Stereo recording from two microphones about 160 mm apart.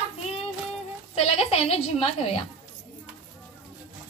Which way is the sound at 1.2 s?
40° left (ahead or behind).